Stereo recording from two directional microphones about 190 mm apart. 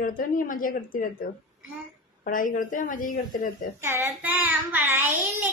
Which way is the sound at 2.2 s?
45° left (ahead or behind).